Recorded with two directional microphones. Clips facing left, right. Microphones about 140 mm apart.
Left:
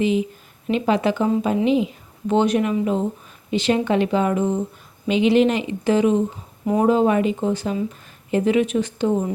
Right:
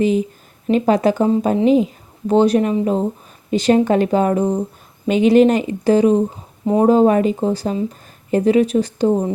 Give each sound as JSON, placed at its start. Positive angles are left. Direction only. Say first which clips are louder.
{"t": 0.0, "sound": "a woman's voice", "louder": "right 3 dB", "side_deg": -40}